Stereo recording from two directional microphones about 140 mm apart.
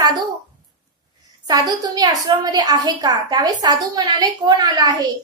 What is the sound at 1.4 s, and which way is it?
A woman's voice, 25° right (ahead or behind).